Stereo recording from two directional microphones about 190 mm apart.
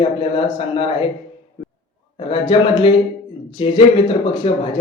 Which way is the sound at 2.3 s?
25° left (ahead or behind).